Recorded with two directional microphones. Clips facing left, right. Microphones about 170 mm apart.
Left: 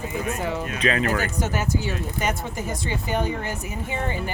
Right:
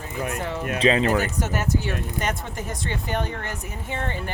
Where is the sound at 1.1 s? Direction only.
Centre (ahead or behind).